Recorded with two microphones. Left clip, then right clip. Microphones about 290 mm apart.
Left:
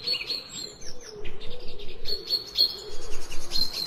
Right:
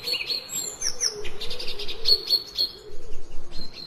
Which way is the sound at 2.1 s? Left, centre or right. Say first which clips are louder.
Right 12 dB; centre.